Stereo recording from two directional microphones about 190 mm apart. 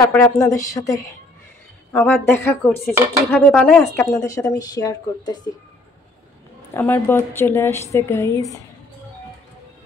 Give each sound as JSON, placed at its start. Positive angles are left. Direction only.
{"t": 0.0, "sound": "a woman's voice", "side_deg": 15}
{"t": 4.3, "sound": "a woman's voice", "side_deg": 20}
{"t": 6.7, "sound": "a woman's voice", "side_deg": 10}